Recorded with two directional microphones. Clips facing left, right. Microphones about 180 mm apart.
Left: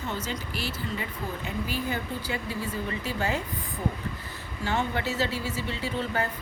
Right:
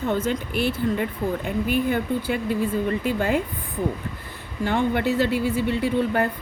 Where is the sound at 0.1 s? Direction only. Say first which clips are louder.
Right 10 dB; 55° right (ahead or behind).